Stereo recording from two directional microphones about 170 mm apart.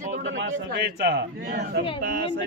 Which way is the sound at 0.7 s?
75° right (ahead or behind).